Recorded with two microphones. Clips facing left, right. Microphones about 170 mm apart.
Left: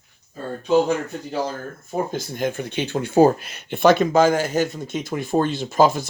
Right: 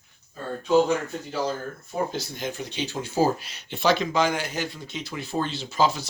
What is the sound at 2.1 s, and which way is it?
Speech, 50° left (ahead or behind).